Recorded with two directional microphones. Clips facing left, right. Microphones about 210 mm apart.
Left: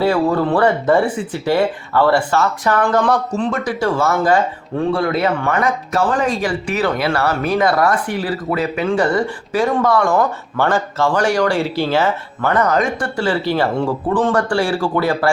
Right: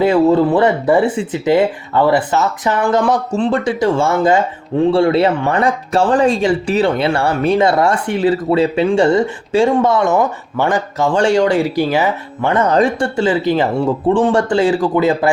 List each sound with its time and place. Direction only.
0.0 s speech: 20° right (ahead or behind)
3.3 s speech: 30° right (ahead or behind)